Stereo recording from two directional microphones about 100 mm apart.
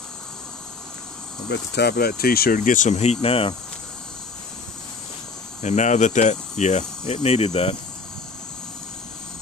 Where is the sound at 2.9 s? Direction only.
85° left.